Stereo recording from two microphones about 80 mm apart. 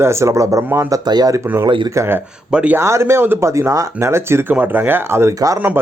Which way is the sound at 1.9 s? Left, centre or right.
Right.